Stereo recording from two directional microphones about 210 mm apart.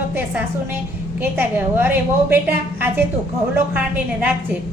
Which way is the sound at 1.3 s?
10° right (ahead or behind).